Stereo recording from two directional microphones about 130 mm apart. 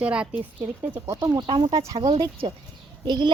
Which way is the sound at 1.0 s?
25° right (ahead or behind).